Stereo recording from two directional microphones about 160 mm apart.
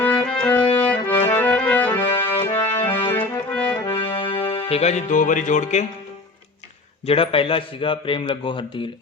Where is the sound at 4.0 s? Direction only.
35° left (ahead or behind); by 5.9 s 50° left (ahead or behind).